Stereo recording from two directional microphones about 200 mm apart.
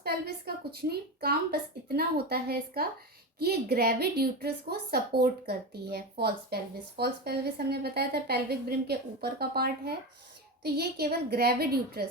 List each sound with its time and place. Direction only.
0.0 s a woman's voice: 50° right (ahead or behind)